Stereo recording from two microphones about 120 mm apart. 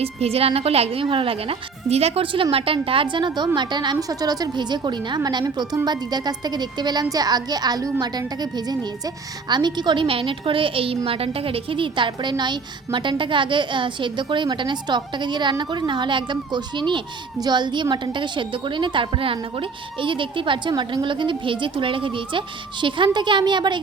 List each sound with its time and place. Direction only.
0.0 s a woman's voice: 55° right (ahead or behind); by 23.8 s 40° right (ahead or behind)